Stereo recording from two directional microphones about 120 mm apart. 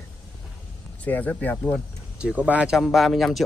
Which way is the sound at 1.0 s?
15° left (ahead or behind).